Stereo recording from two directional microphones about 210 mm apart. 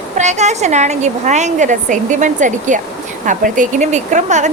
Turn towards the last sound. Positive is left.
turn(degrees=-35)  # may be behind; listen again after turning